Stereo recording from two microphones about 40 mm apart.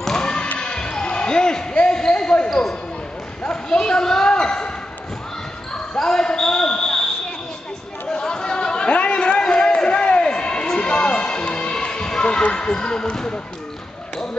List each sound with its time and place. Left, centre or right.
0.0 s basketball bounce: centre
3.6 s basketball bounce: centre
6.0 s basketball bounce: centre
8.1 s chatter: centre
9.4 s a sound: centre
12.5 s speech: left